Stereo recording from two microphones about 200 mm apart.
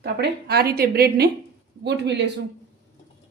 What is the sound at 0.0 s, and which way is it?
A woman's voice, 55° right (ahead or behind).